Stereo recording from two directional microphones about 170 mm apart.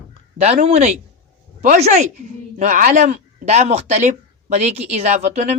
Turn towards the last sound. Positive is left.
turn(degrees=-45)  # may be behind; listen again after turning